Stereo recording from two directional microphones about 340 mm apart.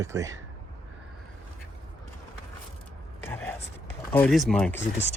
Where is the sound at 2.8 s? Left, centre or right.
Centre.